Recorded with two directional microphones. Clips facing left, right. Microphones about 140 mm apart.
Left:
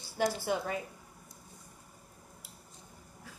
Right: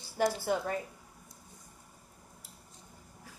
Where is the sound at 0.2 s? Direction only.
45° right (ahead or behind).